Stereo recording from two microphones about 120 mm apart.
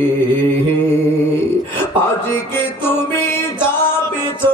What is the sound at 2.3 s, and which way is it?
Music, 20° left (ahead or behind).